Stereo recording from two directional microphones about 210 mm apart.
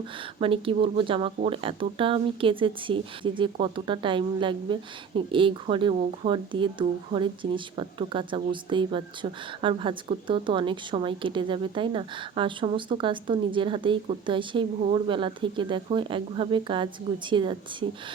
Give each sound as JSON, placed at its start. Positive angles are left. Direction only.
{"t": 0.2, "sound": "speech", "side_deg": -25}